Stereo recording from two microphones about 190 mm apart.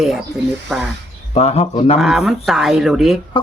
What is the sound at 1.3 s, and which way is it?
Speech, 35° left (ahead or behind).